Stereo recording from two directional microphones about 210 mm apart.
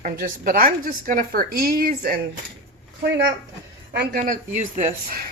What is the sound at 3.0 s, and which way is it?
A woman's voice, 55° right (ahead or behind).